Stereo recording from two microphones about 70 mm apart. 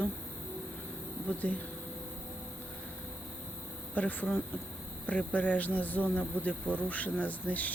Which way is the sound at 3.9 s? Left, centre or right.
Left.